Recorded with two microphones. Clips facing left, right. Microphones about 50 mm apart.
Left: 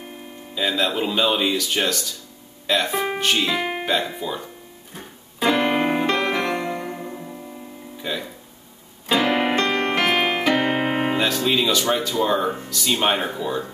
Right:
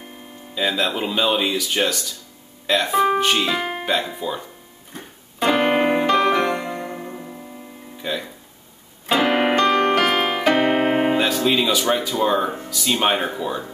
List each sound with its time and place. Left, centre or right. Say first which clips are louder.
0.6 s speech: even; centre
4.9 s music: right 1 dB; centre
5.5 s music: right 2 dB; centre
8.0 s speech: right 2 dB; centre
9.2 s music: right 4 dB; right
10.0 s music: even; centre
10.7 s speech: right 3 dB; centre